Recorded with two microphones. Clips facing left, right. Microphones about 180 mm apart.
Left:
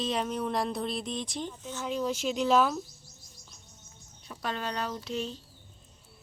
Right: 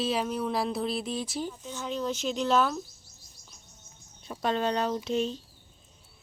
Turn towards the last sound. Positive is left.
turn(degrees=-20)  # may be behind; listen again after turning